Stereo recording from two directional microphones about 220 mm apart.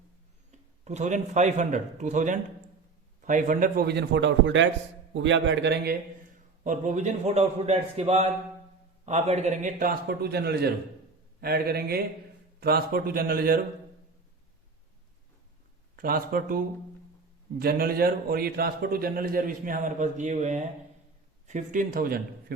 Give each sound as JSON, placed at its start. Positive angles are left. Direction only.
{"t": 0.9, "sound": "a man's voice", "side_deg": -35}
{"t": 6.7, "sound": "a man's voice", "side_deg": -35}
{"t": 16.0, "sound": "a man's voice", "side_deg": -40}
{"t": 17.6, "sound": "a man's voice", "side_deg": -40}